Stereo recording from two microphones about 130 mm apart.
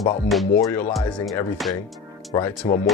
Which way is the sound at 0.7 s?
15° left (ahead or behind).